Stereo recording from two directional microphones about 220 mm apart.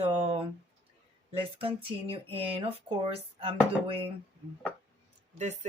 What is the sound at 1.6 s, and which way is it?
Speech, 25° right (ahead or behind).